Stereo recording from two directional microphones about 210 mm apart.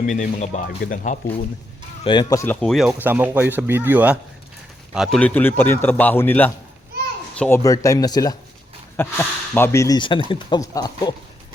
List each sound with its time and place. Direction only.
0.1 s a man's voice: 35° left (ahead or behind)
2.0 s speech: 20° left (ahead or behind); by 4.2 s 5° right (ahead or behind)
4.9 s a man's voice: 5° left (ahead or behind)